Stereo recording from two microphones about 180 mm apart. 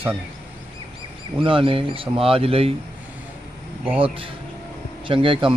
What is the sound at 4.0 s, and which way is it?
Speech, 30° right (ahead or behind).